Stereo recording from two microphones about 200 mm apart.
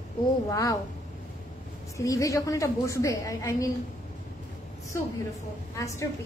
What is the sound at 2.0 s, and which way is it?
A woman's voice, 15° left (ahead or behind).